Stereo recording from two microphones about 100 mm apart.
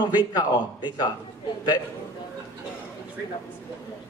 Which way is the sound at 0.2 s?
45° left (ahead or behind).